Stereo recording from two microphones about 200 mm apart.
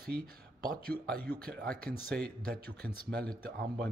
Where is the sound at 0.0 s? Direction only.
50° right (ahead or behind).